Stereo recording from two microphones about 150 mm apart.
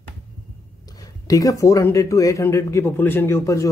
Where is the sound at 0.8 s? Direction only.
25° left (ahead or behind).